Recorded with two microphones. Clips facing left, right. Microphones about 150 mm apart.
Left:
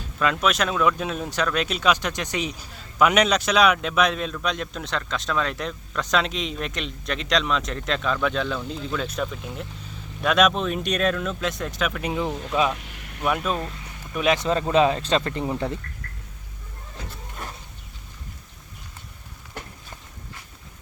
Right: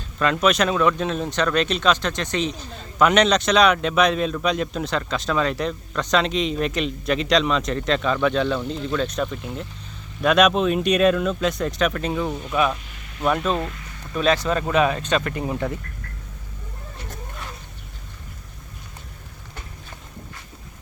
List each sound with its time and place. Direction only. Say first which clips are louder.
0.4 s speech: right 4 dB; centre (ahead or behind)
12.0 s speech: right 1 dB; 15° left (ahead or behind)
12.8 s a sound: left 2 dB; 70° left (ahead or behind)
13.2 s speech: right 3 dB; 5° left (ahead or behind); by 15.4 s 25° left (ahead or behind)